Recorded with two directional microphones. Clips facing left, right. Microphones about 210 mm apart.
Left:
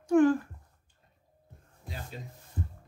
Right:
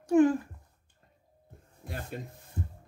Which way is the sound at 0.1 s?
20° right (ahead or behind).